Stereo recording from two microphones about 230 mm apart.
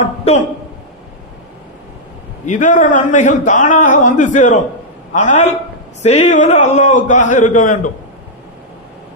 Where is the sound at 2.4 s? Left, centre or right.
Left.